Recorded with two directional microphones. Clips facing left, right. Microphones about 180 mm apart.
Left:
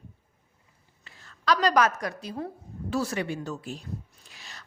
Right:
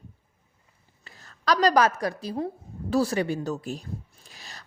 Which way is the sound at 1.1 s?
40° right (ahead or behind).